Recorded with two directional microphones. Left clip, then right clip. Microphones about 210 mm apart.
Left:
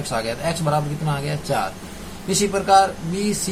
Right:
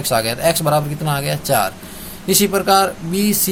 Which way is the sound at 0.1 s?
50° right (ahead or behind).